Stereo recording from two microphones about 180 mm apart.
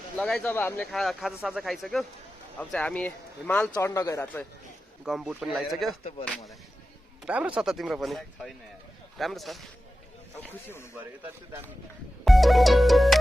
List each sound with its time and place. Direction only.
0.2 s speech: 5° left (ahead or behind)
5.0 s speech: 5° right (ahead or behind)
6.0 s speech: 30° left (ahead or behind)
7.3 s speech: 5° right (ahead or behind)
10.9 s speech: 10° right (ahead or behind)
12.2 s music: centre (ahead or behind)